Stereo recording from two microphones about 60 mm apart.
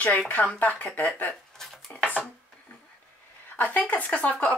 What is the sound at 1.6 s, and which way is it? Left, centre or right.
Dishes, centre.